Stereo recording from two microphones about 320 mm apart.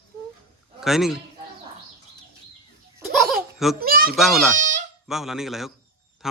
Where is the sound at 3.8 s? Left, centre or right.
Right.